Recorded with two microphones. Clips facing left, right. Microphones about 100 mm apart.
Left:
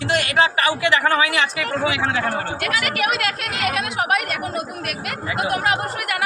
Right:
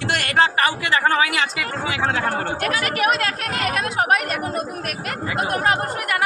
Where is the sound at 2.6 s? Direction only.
35° right (ahead or behind).